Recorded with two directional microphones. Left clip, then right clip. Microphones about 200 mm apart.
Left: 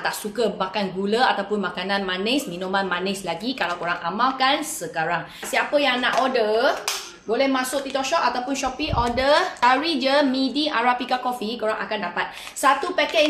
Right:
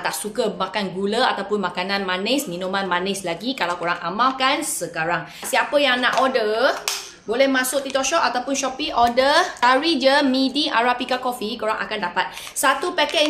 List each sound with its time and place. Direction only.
0.0 s speech: 25° right (ahead or behind)